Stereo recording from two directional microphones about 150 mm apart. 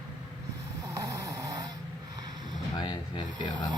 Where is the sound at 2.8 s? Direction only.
30° left (ahead or behind).